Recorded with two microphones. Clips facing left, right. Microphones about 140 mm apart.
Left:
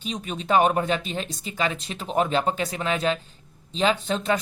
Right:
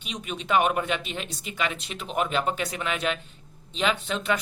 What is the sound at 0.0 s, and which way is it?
Speech, 35° left (ahead or behind).